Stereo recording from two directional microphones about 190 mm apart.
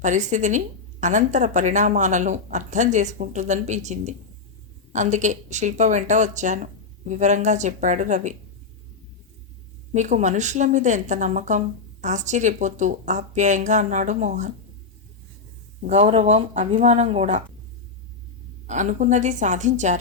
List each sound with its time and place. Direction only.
0.0 s a woman's voice: 40° right (ahead or behind)
9.9 s a woman's voice: 40° right (ahead or behind)
15.8 s a woman's voice: 35° right (ahead or behind)
18.7 s a woman's voice: 40° right (ahead or behind)